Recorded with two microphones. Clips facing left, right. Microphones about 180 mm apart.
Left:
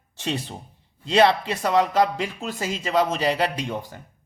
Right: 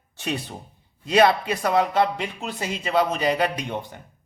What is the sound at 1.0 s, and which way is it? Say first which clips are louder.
A man's voice: even; 30° left (ahead or behind).